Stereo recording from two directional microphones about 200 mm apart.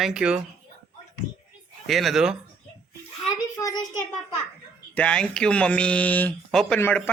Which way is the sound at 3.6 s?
20° left (ahead or behind).